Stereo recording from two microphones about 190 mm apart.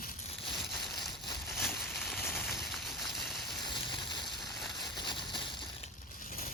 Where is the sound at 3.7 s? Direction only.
25° left (ahead or behind).